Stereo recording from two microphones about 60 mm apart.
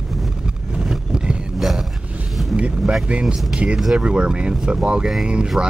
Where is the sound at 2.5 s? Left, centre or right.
Centre.